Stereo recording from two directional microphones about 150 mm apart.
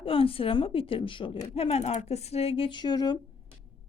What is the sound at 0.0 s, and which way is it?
Speech, 35° left (ahead or behind).